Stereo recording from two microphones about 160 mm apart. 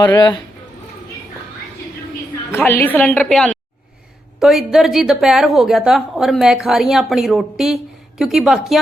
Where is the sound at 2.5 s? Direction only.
15° left (ahead or behind).